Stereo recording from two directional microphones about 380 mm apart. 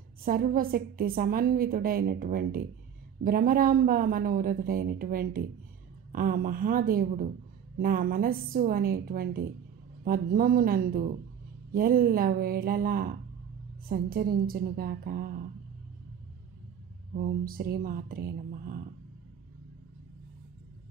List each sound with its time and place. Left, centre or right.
0.2 s a woman's voice: right
17.1 s a woman's voice: right